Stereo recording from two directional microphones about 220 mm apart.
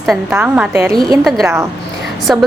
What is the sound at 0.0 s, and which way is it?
Speech, centre (ahead or behind).